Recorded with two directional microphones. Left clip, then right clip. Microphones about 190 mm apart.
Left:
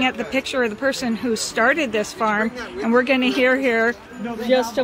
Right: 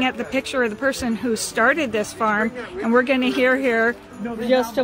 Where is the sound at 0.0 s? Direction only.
Centre (ahead or behind).